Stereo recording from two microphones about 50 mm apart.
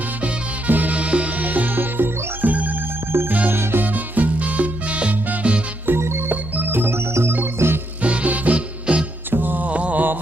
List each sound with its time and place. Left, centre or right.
0.7 s music: right
3.1 s music: right
3.8 s music: right
6.0 s music: right
6.3 s organ: right
7.6 s music: right
8.0 s music: right
9.3 s mantra: right